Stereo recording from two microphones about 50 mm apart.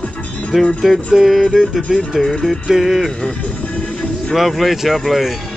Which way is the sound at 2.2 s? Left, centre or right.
Centre.